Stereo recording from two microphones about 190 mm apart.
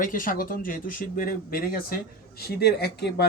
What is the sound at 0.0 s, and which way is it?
Speech, 45° left (ahead or behind).